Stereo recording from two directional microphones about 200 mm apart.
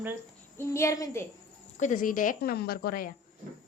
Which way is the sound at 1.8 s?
40° left (ahead or behind).